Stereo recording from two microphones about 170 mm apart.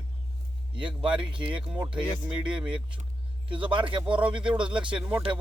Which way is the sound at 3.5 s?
30° right (ahead or behind).